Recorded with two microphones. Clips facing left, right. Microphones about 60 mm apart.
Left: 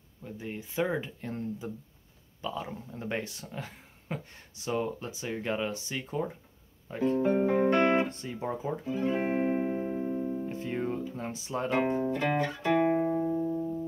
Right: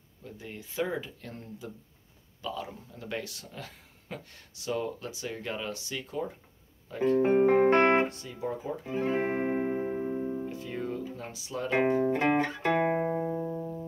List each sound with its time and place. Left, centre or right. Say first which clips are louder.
0.2 s speech: left 4 dB; left
7.2 s music: right 4 dB; right
8.1 s speech: left 1 dB; left
8.8 s music: right 1 dB; right
10.5 s music: left 2 dB; left
11.7 s speech: right 4 dB; right
12.6 s music: left 3 dB; right